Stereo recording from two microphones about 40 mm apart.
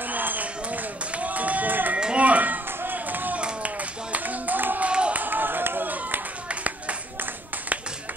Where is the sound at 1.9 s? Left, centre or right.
Right.